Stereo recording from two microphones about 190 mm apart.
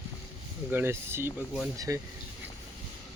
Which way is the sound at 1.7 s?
20° right (ahead or behind).